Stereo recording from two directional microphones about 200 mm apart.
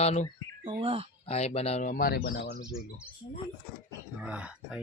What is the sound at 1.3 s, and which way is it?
Speech, 30° left (ahead or behind).